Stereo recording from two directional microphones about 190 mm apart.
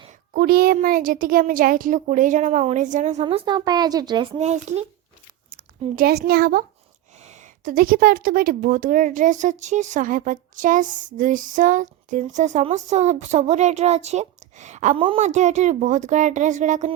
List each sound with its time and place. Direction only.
0.3 s a woman's voice: 55° right (ahead or behind); by 4.9 s 35° right (ahead or behind)
6.0 s a woman's voice: 55° right (ahead or behind)
14.9 s a woman's voice: 30° right (ahead or behind)